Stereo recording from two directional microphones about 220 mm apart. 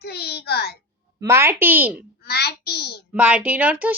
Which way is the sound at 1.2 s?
10° right (ahead or behind).